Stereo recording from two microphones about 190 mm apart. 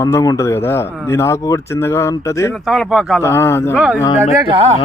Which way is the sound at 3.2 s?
15° left (ahead or behind).